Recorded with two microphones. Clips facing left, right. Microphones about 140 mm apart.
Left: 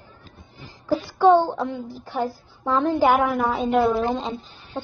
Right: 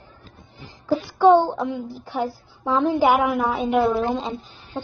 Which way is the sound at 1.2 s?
15° right (ahead or behind).